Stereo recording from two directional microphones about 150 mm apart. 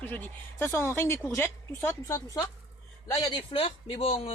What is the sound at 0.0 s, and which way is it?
Speech, 10° left (ahead or behind).